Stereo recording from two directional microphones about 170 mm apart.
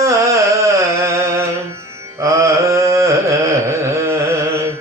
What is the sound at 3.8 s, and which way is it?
Carnatic music, 15° right (ahead or behind).